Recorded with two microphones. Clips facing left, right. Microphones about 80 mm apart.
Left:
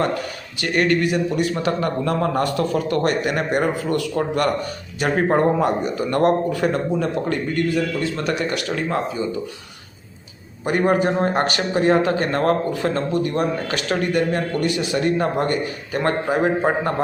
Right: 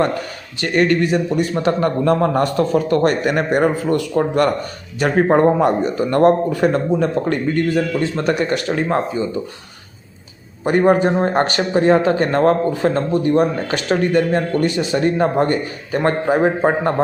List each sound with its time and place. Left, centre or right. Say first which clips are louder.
0.6 s a man's voice: right 3 dB; right
10.6 s a man's voice: right 4 dB; right